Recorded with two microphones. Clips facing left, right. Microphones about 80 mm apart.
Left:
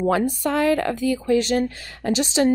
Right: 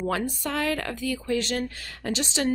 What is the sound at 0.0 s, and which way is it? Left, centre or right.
A woman's voice, centre.